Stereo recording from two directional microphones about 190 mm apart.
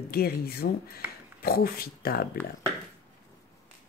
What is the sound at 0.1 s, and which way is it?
Speech, 55° left (ahead or behind).